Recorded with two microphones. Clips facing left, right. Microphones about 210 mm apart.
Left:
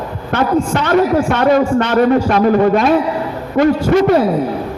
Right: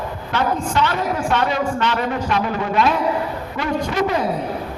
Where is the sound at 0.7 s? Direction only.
50° left (ahead or behind).